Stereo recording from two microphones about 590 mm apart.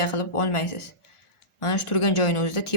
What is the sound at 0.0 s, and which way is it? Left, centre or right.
Speech, left.